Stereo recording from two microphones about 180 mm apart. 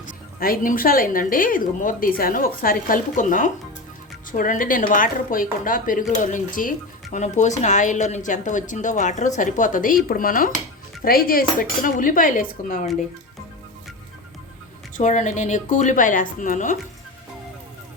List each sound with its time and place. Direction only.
0.3 s speech: 55° left (ahead or behind)
14.9 s speech: 45° left (ahead or behind)